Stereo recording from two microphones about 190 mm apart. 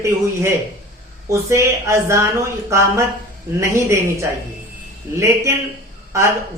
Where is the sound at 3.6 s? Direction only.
15° right (ahead or behind).